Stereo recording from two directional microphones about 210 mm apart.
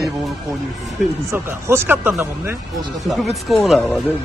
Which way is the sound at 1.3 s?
10° right (ahead or behind).